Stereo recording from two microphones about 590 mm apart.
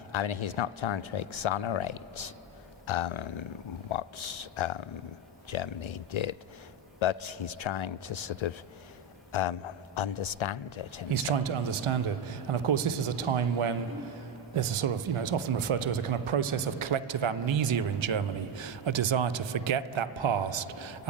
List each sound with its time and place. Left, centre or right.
0.1 s speech: left
11.1 s speech: right